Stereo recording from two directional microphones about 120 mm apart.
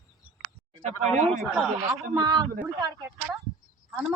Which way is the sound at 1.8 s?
30° right (ahead or behind).